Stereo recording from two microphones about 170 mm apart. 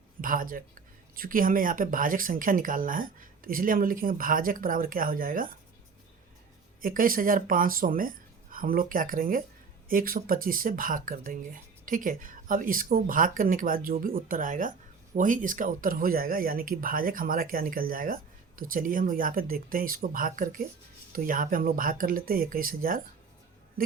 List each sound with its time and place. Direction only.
0.2 s speech: 55° right (ahead or behind)
6.8 s speech: 55° right (ahead or behind)